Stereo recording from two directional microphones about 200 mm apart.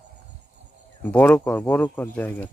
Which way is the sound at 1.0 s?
10° left (ahead or behind).